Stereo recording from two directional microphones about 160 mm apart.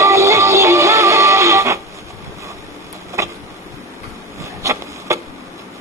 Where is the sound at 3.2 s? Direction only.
20° right (ahead or behind).